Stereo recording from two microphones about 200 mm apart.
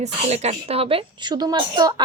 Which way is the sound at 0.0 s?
35° right (ahead or behind).